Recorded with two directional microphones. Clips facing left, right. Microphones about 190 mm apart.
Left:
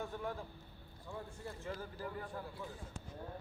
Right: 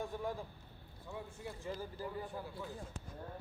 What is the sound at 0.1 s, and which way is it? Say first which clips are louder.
A man's voice: right 2 dB; 10° right (ahead or behind).